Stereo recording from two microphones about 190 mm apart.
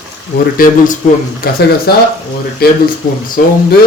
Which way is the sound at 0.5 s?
50° left (ahead or behind).